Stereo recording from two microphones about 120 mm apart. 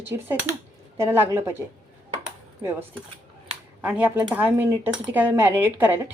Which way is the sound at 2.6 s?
20° right (ahead or behind).